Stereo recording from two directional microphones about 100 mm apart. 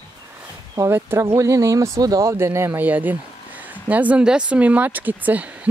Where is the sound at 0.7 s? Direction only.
25° right (ahead or behind).